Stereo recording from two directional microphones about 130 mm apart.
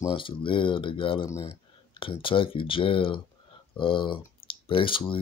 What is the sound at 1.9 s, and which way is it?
Speech, 40° left (ahead or behind).